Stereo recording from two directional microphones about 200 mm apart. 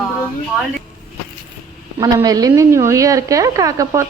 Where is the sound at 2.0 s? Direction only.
20° right (ahead or behind).